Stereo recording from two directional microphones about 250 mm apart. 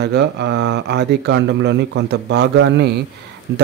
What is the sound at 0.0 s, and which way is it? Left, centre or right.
Speech, right.